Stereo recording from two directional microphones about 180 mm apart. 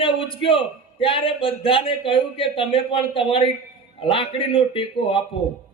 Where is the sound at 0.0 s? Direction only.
30° left (ahead or behind).